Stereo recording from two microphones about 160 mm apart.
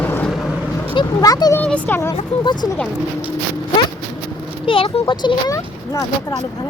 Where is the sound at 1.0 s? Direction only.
25° left (ahead or behind).